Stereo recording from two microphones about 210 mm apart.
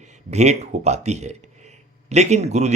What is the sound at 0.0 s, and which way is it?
A man's voice, 35° right (ahead or behind).